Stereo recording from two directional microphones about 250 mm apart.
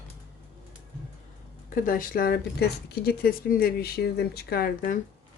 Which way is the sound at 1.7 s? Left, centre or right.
Left.